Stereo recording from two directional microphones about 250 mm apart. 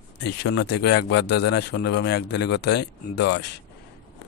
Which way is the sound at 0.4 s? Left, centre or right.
Left.